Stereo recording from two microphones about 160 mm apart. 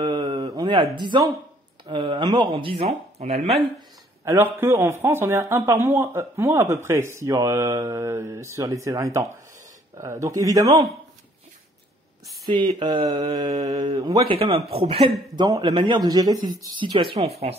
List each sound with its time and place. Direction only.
0.0 s a sound: 30° right (ahead or behind)
1.9 s speech: 30° right (ahead or behind)
4.2 s speech: 15° right (ahead or behind)
12.4 s speech: 30° right (ahead or behind)